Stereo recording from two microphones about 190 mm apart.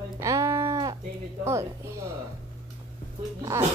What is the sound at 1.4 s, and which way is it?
Speech, 15° right (ahead or behind).